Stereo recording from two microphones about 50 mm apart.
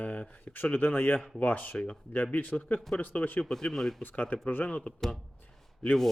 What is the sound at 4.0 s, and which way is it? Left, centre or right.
Speech, left.